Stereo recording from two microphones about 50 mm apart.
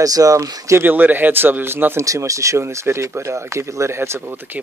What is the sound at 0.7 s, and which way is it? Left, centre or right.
Speech, right.